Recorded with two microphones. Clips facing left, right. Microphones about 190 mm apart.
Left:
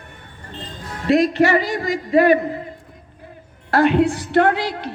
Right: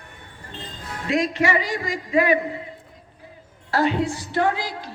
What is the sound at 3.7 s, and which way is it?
A woman's voice, 60° left (ahead or behind).